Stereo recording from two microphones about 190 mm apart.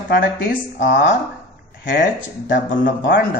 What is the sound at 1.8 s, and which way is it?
Speech, 45° left (ahead or behind).